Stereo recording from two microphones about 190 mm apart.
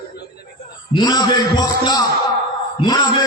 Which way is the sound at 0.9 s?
20° left (ahead or behind).